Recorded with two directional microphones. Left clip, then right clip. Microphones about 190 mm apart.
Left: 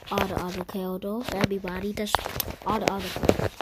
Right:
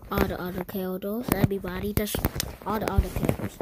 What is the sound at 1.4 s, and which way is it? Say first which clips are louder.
Speech: even; 5° left (ahead or behind).